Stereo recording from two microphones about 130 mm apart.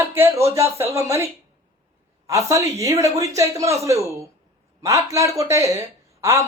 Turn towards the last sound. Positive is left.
turn(degrees=-20)  # may be behind; listen again after turning